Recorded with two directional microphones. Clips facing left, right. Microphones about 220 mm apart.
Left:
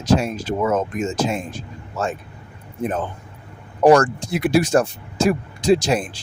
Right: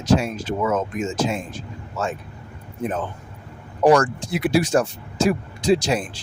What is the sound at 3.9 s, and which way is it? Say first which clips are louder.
Speech: left 3 dB; 50° left (ahead or behind).